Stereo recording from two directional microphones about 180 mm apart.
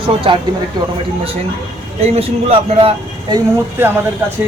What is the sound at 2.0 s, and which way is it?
Speech, 35° right (ahead or behind).